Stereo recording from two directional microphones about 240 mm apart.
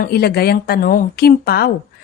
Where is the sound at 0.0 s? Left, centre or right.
Left.